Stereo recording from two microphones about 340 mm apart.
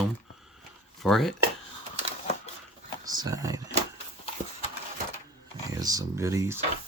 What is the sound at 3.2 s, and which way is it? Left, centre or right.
Speech, centre.